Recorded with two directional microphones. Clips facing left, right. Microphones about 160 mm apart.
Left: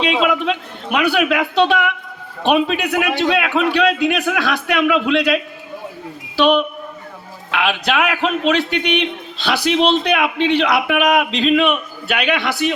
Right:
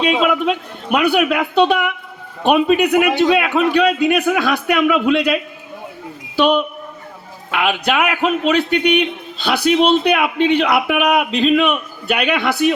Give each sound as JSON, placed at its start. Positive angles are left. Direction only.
{"t": 0.0, "sound": "a man's voice", "side_deg": -5}
{"t": 7.5, "sound": "a man's voice", "side_deg": -10}